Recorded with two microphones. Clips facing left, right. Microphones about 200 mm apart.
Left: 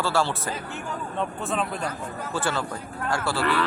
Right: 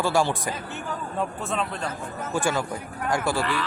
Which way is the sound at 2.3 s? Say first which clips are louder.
Right 3 dB; 15° right (ahead or behind).